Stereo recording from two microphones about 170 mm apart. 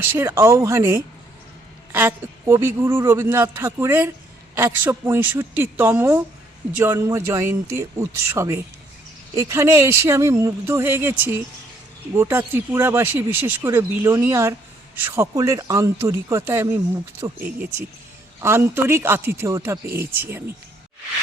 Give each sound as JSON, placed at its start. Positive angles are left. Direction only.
{"t": 0.2, "sound": "speech", "side_deg": -15}